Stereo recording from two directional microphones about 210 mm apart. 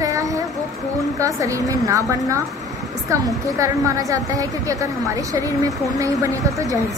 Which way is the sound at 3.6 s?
15° right (ahead or behind).